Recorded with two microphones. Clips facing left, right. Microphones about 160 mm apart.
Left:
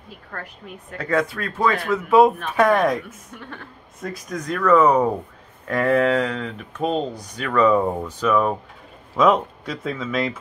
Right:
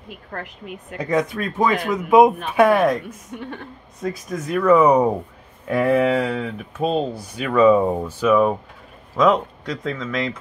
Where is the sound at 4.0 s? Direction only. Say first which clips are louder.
Right 3 dB; 5° right (ahead or behind).